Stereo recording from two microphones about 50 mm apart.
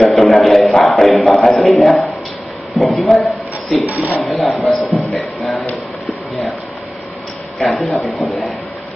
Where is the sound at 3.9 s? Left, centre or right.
Right.